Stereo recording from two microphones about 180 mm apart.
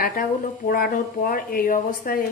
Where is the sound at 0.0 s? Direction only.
55° left (ahead or behind).